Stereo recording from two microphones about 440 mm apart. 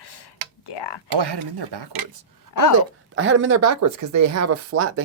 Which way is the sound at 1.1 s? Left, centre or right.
Right.